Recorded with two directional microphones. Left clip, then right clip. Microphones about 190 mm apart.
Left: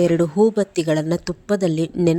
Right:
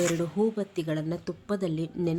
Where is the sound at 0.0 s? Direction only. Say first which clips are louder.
Left 10 dB; 35° left (ahead or behind).